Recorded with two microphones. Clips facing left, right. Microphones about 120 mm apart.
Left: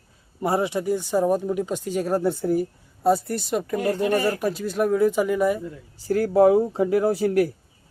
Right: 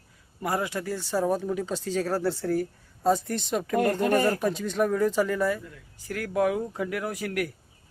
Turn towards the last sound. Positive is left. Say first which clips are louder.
# left 10 dB
turn(degrees=30)  # may be behind; listen again after turning